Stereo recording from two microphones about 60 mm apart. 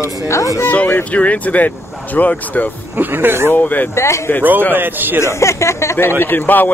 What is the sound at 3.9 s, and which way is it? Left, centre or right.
Speech, left.